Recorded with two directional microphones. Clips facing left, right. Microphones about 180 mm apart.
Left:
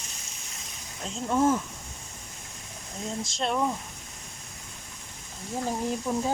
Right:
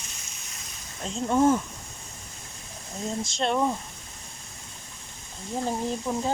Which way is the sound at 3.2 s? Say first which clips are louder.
Right 3 dB; centre (ahead or behind).